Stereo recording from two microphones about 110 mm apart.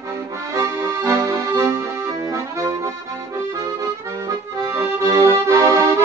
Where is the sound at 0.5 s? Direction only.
30° right (ahead or behind).